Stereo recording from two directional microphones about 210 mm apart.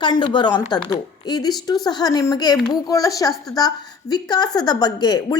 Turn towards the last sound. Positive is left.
turn(degrees=20)  # may be behind; listen again after turning